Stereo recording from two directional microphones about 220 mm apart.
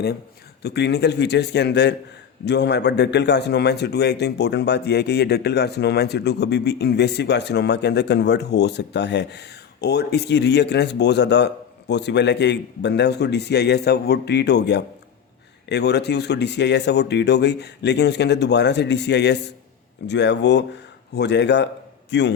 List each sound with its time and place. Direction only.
0.6 s a man's voice: 50° left (ahead or behind)